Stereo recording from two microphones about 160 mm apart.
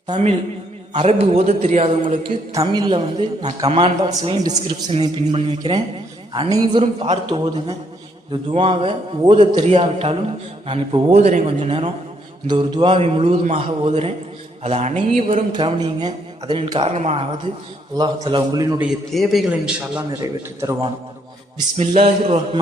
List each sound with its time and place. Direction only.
0.1 s a man's voice: 40° right (ahead or behind)
2.5 s a man's voice: 25° right (ahead or behind); by 7.2 s 40° right (ahead or behind)
8.3 s a man's voice: 35° right (ahead or behind)
15.5 s a man's voice: 30° right (ahead or behind); by 17.2 s 45° right (ahead or behind)
17.9 s a man's voice: 25° right (ahead or behind)
19.1 s a man's voice: centre (ahead or behind)
20.0 s a man's voice: 25° right (ahead or behind)
21.8 s a man's voice: 40° right (ahead or behind)